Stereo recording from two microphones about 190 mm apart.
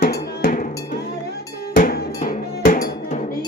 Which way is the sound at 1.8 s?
45° left (ahead or behind).